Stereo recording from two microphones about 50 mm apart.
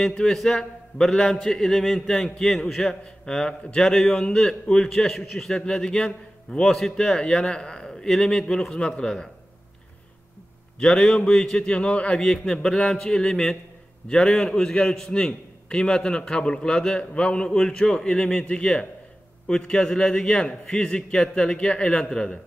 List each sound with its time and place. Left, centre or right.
0.2 s a man's voice: centre
6.6 s a man's voice: centre
10.8 s a man's voice: centre
12.2 s a man's voice: centre